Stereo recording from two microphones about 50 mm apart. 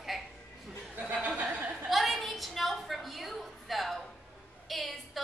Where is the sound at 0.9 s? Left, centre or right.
Right.